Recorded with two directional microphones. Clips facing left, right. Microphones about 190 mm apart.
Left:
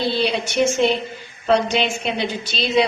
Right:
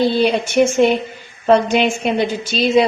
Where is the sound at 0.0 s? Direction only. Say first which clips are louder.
Right 6 dB; 50° right (ahead or behind).